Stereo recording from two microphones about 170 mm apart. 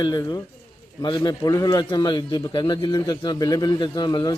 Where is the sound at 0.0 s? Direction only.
25° left (ahead or behind).